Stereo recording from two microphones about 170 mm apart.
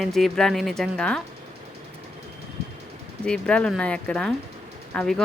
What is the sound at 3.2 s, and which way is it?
A woman's voice, 5° left (ahead or behind).